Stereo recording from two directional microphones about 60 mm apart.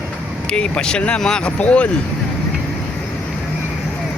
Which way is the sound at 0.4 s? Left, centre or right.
Centre.